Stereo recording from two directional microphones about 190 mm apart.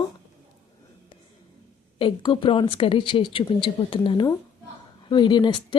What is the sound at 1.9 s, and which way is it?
Speech, 25° left (ahead or behind).